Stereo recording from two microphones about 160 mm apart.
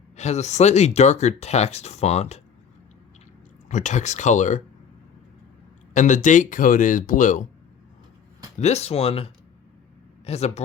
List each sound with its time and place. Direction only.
0.2 s speech: 45° left (ahead or behind)
3.7 s speech: 50° left (ahead or behind)
5.9 s speech: 50° left (ahead or behind)
8.5 s speech: 45° left (ahead or behind)